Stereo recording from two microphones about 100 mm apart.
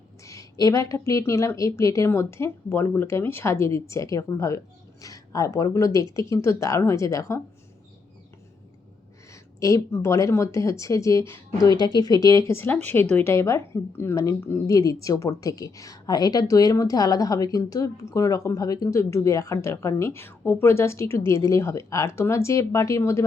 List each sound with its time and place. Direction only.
0.2 s a woman's voice: 35° left (ahead or behind)
9.3 s a woman's voice: 30° left (ahead or behind)